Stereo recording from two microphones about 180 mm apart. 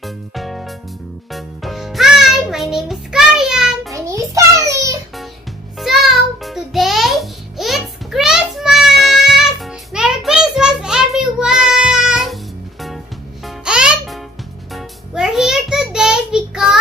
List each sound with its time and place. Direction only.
0.0 s music: centre (ahead or behind)
3.9 s a sound: 15° right (ahead or behind)
5.8 s music: centre (ahead or behind)
13.4 s music: 5° right (ahead or behind)